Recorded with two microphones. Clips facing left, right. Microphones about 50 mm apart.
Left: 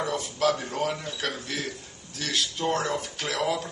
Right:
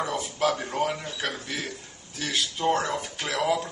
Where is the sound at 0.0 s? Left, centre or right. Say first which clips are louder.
Even; centre.